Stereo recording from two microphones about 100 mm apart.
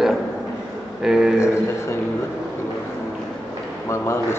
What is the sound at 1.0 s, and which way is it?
Speech, 5° right (ahead or behind).